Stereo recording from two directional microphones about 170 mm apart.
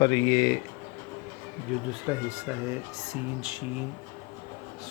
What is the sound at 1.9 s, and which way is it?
Speech, 10° right (ahead or behind).